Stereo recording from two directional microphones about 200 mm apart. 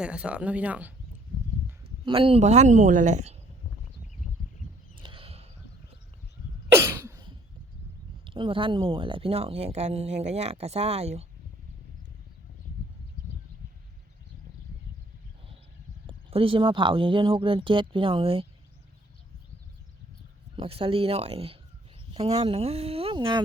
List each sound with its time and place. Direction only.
0.0 s speech: 5° right (ahead or behind)
2.0 s speech: 25° right (ahead or behind)
4.9 s a sound: 25° right (ahead or behind)
6.7 s cough: 15° right (ahead or behind)
8.2 s speech: 25° right (ahead or behind)
16.0 s speech: 25° right (ahead or behind)
20.6 s speech: 25° right (ahead or behind)